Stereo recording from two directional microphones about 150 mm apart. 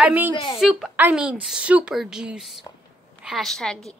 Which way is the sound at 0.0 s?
10° right (ahead or behind).